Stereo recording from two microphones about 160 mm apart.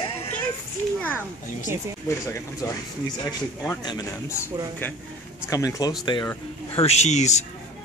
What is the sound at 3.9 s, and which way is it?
Speech, 20° left (ahead or behind).